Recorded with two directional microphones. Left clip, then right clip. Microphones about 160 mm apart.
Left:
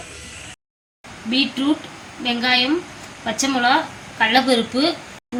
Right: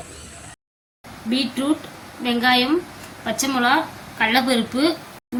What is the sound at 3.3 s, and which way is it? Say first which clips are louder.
A woman's voice: left 1 dB; 40° left (ahead or behind).